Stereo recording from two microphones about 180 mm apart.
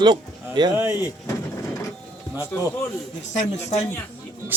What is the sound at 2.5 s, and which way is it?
Speech, 10° left (ahead or behind).